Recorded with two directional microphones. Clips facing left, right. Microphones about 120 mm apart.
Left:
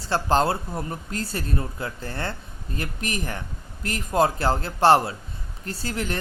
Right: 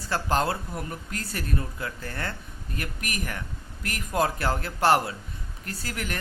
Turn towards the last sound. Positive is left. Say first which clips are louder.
# left 5 dB
turn(degrees=30)  # may be behind; listen again after turning